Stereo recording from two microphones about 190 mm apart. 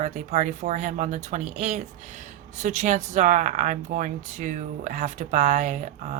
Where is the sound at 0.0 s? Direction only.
40° right (ahead or behind).